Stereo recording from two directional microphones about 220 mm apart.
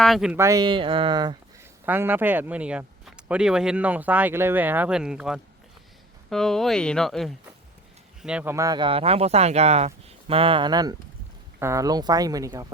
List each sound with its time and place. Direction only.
0.0 s speech: centre (ahead or behind); by 1.4 s 20° right (ahead or behind)
1.8 s speech: 10° right (ahead or behind)